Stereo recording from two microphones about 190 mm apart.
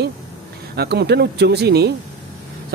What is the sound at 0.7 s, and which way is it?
Speech, 60° right (ahead or behind).